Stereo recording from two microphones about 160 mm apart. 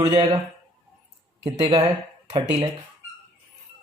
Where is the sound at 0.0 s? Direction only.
35° right (ahead or behind).